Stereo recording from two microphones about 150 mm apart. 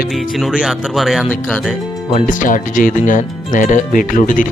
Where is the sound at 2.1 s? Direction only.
55° left (ahead or behind).